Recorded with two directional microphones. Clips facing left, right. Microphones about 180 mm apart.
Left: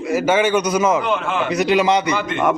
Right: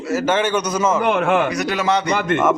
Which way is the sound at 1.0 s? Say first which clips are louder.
Right 4 dB; 55° right (ahead or behind).